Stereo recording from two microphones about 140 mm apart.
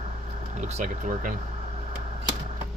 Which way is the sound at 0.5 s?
55° right (ahead or behind).